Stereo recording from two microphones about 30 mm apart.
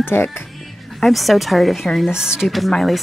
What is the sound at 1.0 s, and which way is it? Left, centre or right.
Speech, centre.